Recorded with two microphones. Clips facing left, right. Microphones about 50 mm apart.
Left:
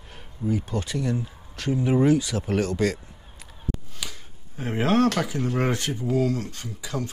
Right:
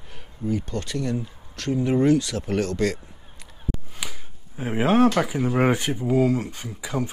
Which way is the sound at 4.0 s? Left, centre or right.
Centre.